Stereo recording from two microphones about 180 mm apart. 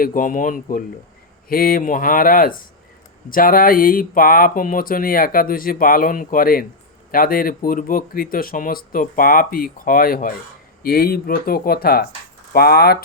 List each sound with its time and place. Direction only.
0.0 s speech: 50° left (ahead or behind)